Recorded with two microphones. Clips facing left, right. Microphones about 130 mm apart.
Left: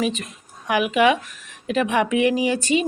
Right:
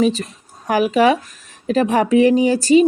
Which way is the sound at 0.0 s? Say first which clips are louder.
Right 7 dB; 35° right (ahead or behind).